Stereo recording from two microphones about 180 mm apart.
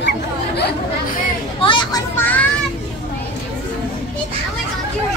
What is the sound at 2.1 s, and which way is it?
Children playing, 10° left (ahead or behind).